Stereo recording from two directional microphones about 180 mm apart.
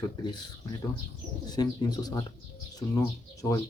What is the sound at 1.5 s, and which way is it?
Speech, 20° left (ahead or behind).